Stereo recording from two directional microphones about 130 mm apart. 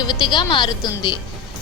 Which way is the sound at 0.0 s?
35° left (ahead or behind).